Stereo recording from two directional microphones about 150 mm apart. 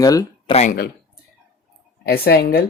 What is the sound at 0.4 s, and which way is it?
Speech, 45° left (ahead or behind).